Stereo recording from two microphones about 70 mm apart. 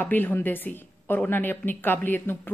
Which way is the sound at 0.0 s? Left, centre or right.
Left.